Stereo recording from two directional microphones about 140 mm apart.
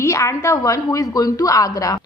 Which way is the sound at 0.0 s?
20° left (ahead or behind).